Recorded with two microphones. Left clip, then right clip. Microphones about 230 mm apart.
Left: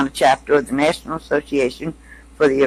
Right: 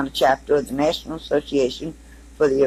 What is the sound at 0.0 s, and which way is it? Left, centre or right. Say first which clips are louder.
A man's voice: left 3 dB; left.